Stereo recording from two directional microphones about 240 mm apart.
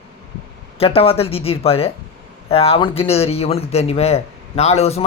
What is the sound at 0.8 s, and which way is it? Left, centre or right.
A man's voice, left.